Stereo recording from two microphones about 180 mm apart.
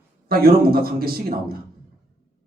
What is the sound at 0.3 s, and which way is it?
Speech, 55° right (ahead or behind).